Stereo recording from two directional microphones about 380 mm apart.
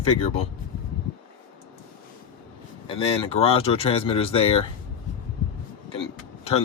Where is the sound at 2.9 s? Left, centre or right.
Centre.